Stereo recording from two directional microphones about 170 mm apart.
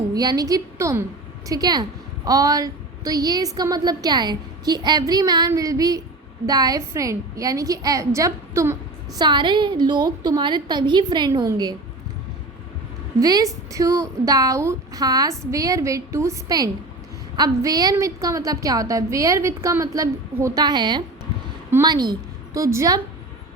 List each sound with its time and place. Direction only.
0.1 s a woman's voice: 20° right (ahead or behind)
9.2 s a woman's voice: 25° right (ahead or behind)
13.1 s a woman's voice: 20° right (ahead or behind)